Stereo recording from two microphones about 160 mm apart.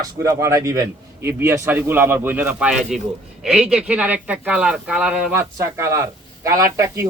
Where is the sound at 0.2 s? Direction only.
20° right (ahead or behind).